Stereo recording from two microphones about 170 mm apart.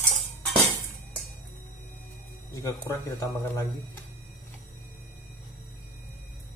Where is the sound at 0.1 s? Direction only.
Centre (ahead or behind).